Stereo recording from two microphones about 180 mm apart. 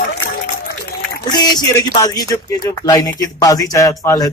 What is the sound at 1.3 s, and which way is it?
Speech, 20° left (ahead or behind).